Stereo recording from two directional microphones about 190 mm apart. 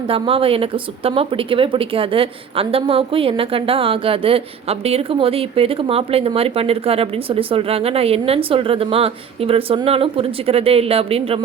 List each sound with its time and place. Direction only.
0.1 s speech: 30° right (ahead or behind)